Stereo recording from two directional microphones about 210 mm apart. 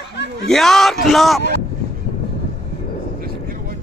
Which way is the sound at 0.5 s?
Centre (ahead or behind).